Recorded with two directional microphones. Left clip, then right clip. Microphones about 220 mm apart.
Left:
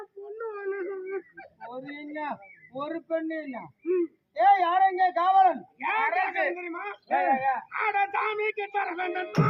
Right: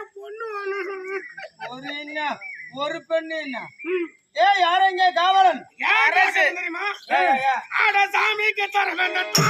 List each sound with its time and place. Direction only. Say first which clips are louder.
0.3 s whimper: right 4 dB; 10° right (ahead or behind)
1.7 s a man's voice: right 6 dB; 5° left (ahead or behind)
6.1 s speech: right 8 dB; 20° right (ahead or behind)
6.6 s speech: right 9 dB; 10° right (ahead or behind)